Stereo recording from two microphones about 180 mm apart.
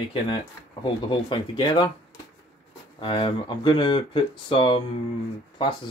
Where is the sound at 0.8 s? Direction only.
25° left (ahead or behind).